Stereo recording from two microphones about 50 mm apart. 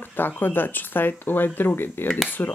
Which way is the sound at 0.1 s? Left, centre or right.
Left.